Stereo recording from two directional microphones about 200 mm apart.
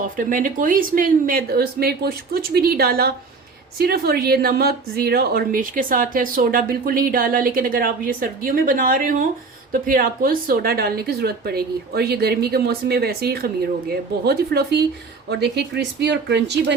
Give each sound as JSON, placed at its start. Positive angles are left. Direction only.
{"t": 0.2, "sound": "speech", "side_deg": -40}